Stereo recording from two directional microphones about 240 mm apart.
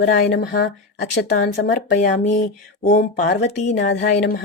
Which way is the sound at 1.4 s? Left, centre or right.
Left.